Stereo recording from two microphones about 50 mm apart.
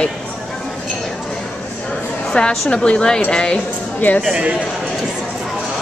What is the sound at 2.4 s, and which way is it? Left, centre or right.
Speech, left.